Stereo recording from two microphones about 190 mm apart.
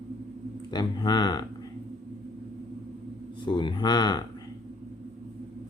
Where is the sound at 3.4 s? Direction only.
25° left (ahead or behind).